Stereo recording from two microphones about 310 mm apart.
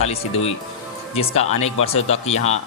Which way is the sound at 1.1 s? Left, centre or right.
Centre.